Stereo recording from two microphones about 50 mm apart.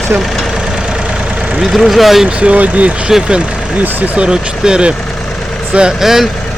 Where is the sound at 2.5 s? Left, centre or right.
Right.